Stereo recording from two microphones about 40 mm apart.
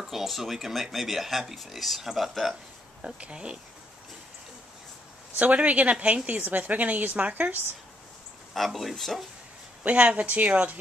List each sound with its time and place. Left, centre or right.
0.0 s speech: centre
3.2 s speech: right
5.4 s speech: right
6.4 s a woman's voice: right
8.5 s speech: centre
9.8 s speech: right